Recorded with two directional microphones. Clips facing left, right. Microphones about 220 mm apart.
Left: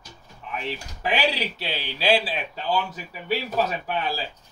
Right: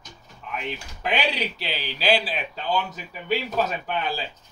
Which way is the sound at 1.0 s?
5° left (ahead or behind).